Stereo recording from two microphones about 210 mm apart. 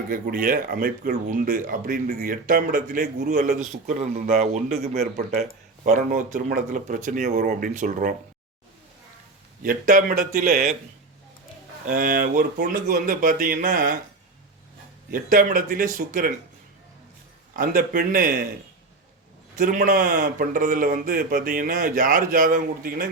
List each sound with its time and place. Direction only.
0.1 s speech: 40° right (ahead or behind)
4.9 s speech: 45° right (ahead or behind)
9.6 s speech: 40° right (ahead or behind)
11.9 s speech: 40° right (ahead or behind)
15.1 s speech: 40° right (ahead or behind)
17.6 s speech: 40° right (ahead or behind)
19.5 s speech: 40° right (ahead or behind)